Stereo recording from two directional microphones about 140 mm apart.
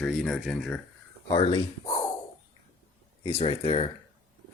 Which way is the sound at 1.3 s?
40° left (ahead or behind).